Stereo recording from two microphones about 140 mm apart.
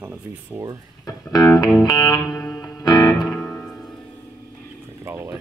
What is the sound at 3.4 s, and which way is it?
Music, 15° left (ahead or behind).